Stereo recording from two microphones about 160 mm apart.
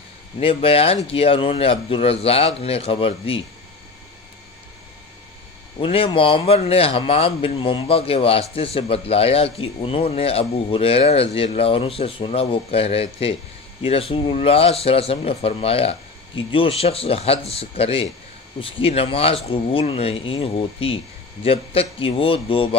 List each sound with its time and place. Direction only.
0.4 s speech: 35° left (ahead or behind)
5.8 s speech: 35° left (ahead or behind)